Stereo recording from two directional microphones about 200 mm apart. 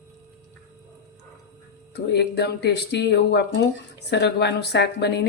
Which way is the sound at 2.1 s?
55° left (ahead or behind).